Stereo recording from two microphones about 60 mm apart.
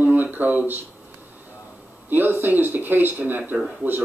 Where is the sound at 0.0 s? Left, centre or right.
Right.